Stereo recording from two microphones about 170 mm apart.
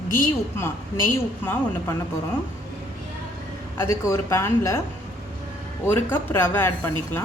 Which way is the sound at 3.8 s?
15° left (ahead or behind).